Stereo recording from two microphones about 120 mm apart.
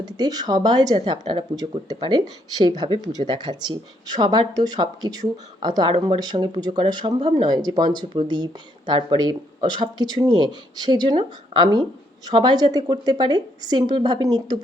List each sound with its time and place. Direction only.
0.0 s speech: 35° right (ahead or behind)